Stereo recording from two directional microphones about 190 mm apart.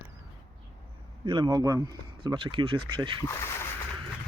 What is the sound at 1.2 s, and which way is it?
Speech, 25° right (ahead or behind).